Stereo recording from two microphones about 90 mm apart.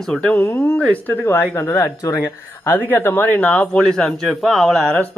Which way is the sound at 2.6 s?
25° left (ahead or behind).